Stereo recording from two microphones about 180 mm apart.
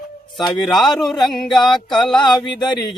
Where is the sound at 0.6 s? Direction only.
Centre (ahead or behind).